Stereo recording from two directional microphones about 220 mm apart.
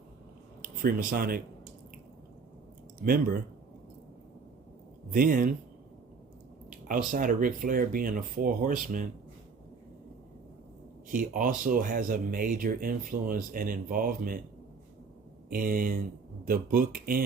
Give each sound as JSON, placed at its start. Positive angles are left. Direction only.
{"t": 0.6, "sound": "speech", "side_deg": -40}
{"t": 3.0, "sound": "speech", "side_deg": -40}
{"t": 5.1, "sound": "speech", "side_deg": -40}
{"t": 6.7, "sound": "speech", "side_deg": -35}
{"t": 11.1, "sound": "speech", "side_deg": -40}
{"t": 15.4, "sound": "speech", "side_deg": -40}